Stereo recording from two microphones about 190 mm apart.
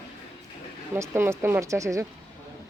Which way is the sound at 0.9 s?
10° right (ahead or behind).